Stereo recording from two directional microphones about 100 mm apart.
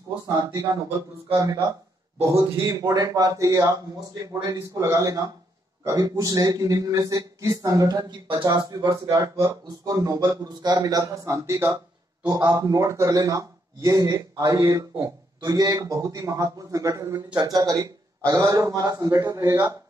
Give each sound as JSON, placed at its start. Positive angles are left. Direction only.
{"t": 0.3, "sound": "speech", "side_deg": -40}
{"t": 2.2, "sound": "speech", "side_deg": -35}